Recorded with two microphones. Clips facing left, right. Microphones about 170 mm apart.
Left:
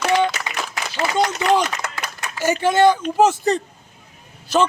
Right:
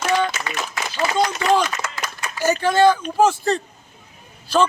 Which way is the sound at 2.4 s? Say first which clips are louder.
Even; 20° left (ahead or behind).